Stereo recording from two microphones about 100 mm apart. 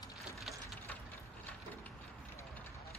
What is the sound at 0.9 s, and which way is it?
Ratchet, 15° left (ahead or behind).